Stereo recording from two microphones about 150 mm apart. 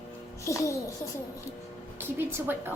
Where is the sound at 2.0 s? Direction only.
15° right (ahead or behind).